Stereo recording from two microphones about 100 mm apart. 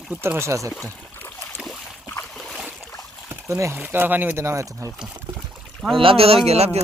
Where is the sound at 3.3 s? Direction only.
30° right (ahead or behind).